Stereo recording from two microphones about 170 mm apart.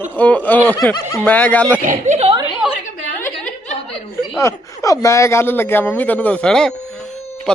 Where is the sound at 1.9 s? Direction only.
40° right (ahead or behind).